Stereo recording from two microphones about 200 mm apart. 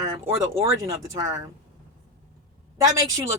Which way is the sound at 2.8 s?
15° right (ahead or behind).